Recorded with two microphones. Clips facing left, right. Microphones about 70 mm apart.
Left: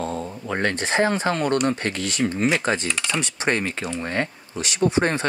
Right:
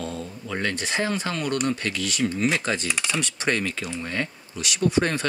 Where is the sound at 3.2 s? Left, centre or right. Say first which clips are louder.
Left 3 dB; left.